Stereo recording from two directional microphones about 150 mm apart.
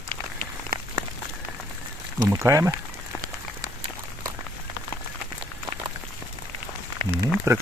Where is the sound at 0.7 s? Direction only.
90° right.